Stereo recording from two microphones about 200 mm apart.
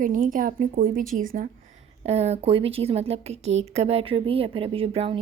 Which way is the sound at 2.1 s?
30° right (ahead or behind).